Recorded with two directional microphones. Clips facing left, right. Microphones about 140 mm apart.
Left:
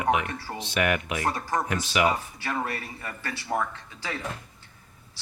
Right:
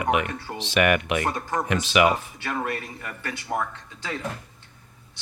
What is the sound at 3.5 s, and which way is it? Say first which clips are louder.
Speech: even; 10° right (ahead or behind).